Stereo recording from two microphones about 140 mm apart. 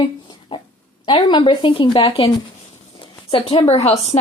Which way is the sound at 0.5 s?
40° left (ahead or behind).